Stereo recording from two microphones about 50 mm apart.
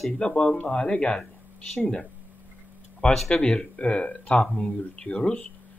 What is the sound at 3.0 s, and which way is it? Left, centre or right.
Speech, centre.